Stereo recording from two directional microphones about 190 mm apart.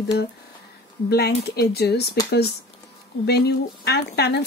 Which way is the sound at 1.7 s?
55° left (ahead or behind).